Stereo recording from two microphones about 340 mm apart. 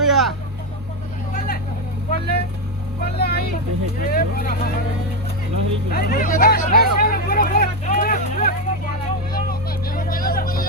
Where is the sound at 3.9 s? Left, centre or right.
Left.